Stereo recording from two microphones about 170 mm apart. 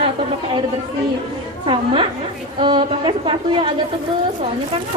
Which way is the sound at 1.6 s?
30° right (ahead or behind).